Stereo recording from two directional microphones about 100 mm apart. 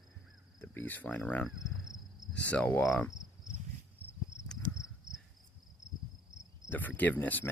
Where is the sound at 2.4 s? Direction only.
15° left (ahead or behind).